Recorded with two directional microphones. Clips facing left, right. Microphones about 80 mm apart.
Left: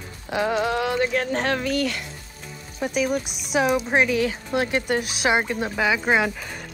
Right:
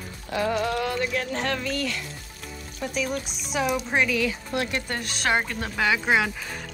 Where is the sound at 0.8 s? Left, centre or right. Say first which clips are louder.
Left 4 dB; left.